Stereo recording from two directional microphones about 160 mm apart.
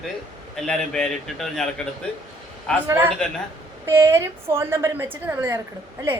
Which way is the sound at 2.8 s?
15° right (ahead or behind).